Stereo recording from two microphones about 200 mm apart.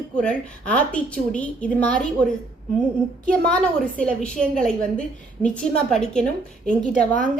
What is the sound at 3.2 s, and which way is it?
A woman's voice, 5° left (ahead or behind).